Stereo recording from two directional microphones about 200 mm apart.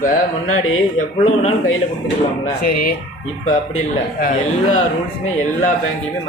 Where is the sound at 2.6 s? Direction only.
45° left (ahead or behind).